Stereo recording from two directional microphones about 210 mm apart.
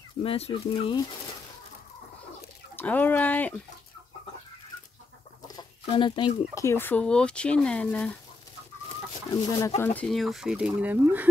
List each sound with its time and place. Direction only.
0.2 s speech: 25° left (ahead or behind)
2.7 s speech: 10° left (ahead or behind)
5.6 s speech: 25° left (ahead or behind); by 8.2 s 5° left (ahead or behind)
9.3 s speech: 15° left (ahead or behind)
9.9 s speech: centre (ahead or behind)